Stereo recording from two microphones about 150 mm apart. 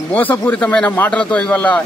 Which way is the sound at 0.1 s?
10° left (ahead or behind).